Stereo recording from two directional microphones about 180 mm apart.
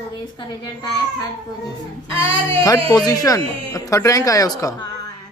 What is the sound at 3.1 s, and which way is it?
Speech, 20° left (ahead or behind).